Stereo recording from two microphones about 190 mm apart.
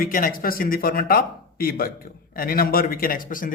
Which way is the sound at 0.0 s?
50° left (ahead or behind).